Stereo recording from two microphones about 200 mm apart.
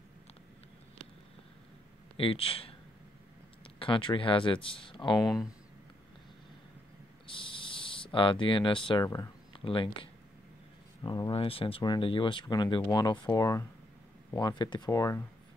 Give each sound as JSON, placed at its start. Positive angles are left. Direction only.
{"t": 2.1, "sound": "speech", "side_deg": 25}
{"t": 3.8, "sound": "speech", "side_deg": 25}
{"t": 5.2, "sound": "speech", "side_deg": 0}
{"t": 7.3, "sound": "a sound", "side_deg": 25}
{"t": 9.6, "sound": "speech", "side_deg": 25}
{"t": 11.1, "sound": "speech", "side_deg": 25}